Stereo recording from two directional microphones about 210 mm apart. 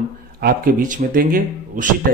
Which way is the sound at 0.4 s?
40° right (ahead or behind).